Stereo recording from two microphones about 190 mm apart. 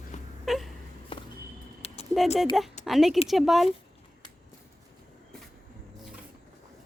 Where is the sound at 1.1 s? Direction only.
25° left (ahead or behind).